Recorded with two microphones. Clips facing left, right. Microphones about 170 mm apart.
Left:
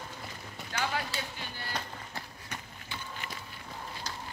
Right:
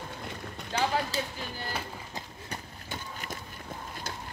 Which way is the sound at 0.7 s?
35° right (ahead or behind).